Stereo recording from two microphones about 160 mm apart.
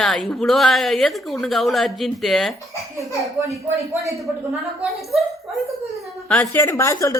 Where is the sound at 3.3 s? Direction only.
20° right (ahead or behind).